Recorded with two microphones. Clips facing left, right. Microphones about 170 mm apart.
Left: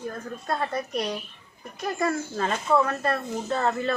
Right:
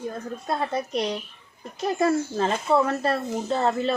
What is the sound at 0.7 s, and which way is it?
Speech, 20° right (ahead or behind).